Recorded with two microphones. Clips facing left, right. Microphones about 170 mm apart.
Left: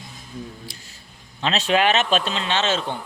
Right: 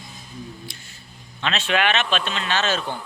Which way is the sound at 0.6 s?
35° left (ahead or behind).